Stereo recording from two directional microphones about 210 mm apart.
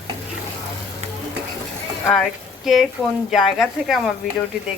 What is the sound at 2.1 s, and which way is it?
A woman's voice, centre (ahead or behind).